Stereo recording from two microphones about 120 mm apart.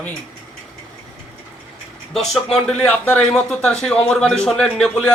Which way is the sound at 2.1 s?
5° left (ahead or behind).